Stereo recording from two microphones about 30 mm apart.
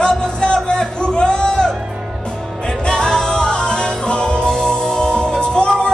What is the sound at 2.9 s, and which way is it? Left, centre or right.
Music, left.